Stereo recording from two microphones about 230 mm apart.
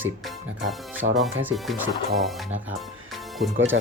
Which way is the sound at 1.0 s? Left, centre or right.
Right.